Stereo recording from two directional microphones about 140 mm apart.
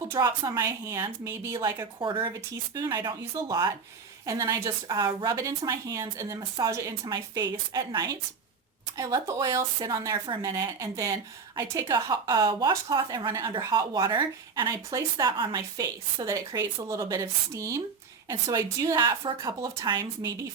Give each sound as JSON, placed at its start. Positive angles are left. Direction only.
{"t": 0.1, "sound": "a woman's voice", "side_deg": -30}